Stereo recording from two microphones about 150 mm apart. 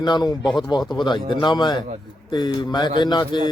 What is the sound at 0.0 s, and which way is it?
A man's voice, 30° left (ahead or behind).